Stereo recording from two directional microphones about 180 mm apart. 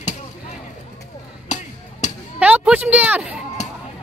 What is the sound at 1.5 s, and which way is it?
Chop, 40° left (ahead or behind).